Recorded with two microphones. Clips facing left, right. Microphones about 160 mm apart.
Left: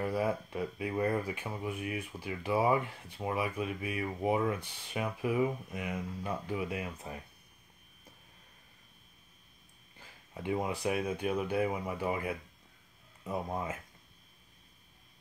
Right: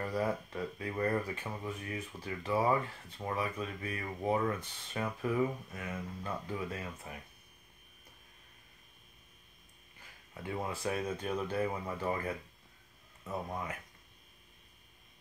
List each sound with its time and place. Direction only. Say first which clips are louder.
0.0 s speech: left 2 dB; 10° left (ahead or behind)
10.3 s speech: left 5 dB; 15° left (ahead or behind)